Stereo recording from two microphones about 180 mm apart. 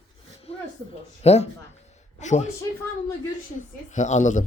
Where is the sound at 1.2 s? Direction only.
35° left (ahead or behind).